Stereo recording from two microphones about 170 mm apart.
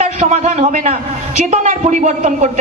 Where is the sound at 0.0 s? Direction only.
40° right (ahead or behind).